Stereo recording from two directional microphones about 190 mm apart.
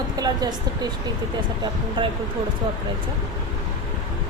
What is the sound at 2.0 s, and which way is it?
Speech, 25° right (ahead or behind).